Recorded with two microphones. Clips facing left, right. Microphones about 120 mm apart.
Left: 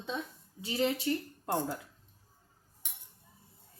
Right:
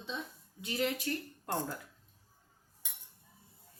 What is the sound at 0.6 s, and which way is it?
Speech, 30° left (ahead or behind).